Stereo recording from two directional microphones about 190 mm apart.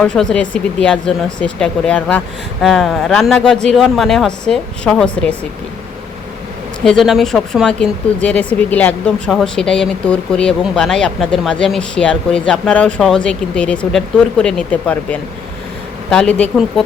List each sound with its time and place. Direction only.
0.0 s speech: 5° left (ahead or behind)
6.8 s speech: centre (ahead or behind)